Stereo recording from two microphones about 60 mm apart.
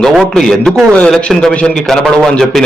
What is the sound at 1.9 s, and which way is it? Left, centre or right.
Speech, centre.